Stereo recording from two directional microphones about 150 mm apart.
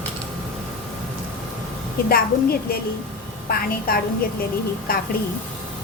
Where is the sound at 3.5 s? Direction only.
80° left.